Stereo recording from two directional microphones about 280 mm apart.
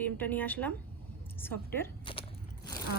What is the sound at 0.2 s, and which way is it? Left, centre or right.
Speech, centre.